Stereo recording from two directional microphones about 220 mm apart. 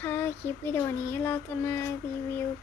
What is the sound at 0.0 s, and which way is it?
Child singing, 10° left (ahead or behind).